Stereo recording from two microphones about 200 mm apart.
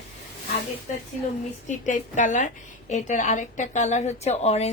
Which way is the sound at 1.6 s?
40° left (ahead or behind).